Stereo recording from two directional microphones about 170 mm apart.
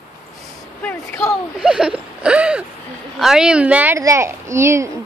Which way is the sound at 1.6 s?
5° right (ahead or behind).